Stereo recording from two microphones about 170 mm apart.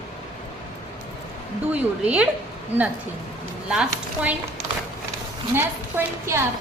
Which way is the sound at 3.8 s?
10° right (ahead or behind).